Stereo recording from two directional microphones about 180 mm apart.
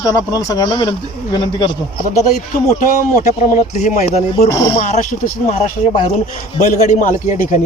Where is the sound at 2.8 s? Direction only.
45° left (ahead or behind).